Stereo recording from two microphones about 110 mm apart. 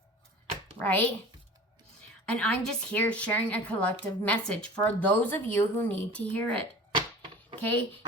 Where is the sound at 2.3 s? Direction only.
10° left (ahead or behind).